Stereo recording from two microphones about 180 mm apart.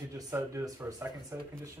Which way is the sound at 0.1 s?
15° right (ahead or behind).